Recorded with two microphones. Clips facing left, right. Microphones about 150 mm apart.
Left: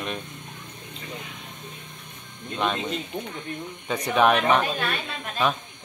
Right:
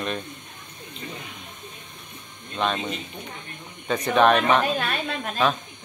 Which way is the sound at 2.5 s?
10° left (ahead or behind).